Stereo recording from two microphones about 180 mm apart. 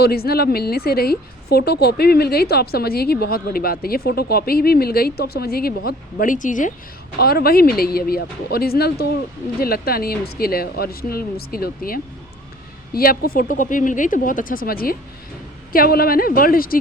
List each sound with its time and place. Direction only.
0.0 s a woman's voice: 60° left (ahead or behind)
7.2 s a woman's voice: 60° left (ahead or behind)